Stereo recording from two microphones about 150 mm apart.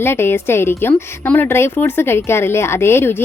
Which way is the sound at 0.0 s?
15° left (ahead or behind).